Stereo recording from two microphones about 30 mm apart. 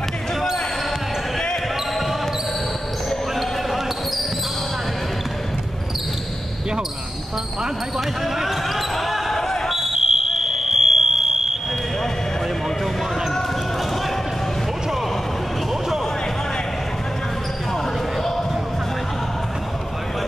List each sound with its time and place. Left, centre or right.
3.1 s basketball bounce: centre
8.4 s basketball bounce: centre
9.3 s basketball bounce: centre
9.7 s basketball bounce: centre
9.9 s fire alarm: centre